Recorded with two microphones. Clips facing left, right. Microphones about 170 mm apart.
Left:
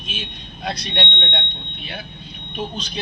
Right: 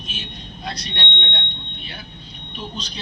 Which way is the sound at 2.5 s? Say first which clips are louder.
Left 5 dB; 55° left (ahead or behind).